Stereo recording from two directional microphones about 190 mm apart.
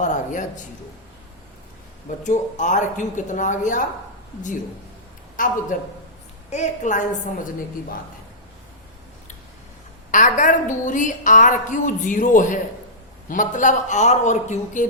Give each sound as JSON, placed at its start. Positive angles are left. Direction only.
{"t": 0.0, "sound": "speech", "side_deg": 40}
{"t": 2.2, "sound": "speech", "side_deg": 40}
{"t": 5.4, "sound": "a man's voice", "side_deg": 45}
{"t": 10.1, "sound": "a woman's voice", "side_deg": 40}